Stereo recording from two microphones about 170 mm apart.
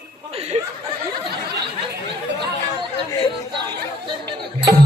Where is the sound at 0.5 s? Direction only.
40° right (ahead or behind).